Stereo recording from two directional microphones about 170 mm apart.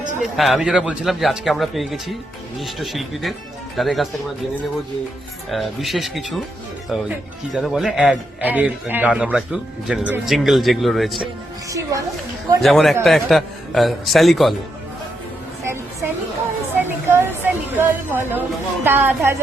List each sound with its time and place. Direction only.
0.2 s speech: centre (ahead or behind)
5.5 s speech: centre (ahead or behind)
11.7 s a woman's voice: 20° right (ahead or behind)
12.6 s speech: centre (ahead or behind)
15.6 s a sound: 15° right (ahead or behind)
18.9 s a woman's voice: 10° right (ahead or behind)